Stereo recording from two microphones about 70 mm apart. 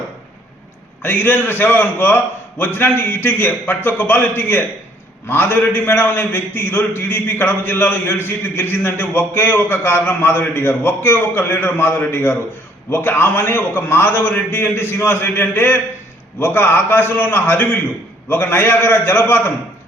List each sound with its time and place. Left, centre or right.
1.0 s a man's voice: left